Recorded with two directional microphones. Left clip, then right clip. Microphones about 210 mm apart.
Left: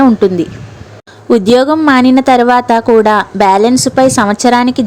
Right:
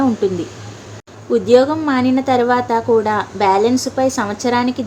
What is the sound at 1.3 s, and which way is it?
Speech, 45° left (ahead or behind).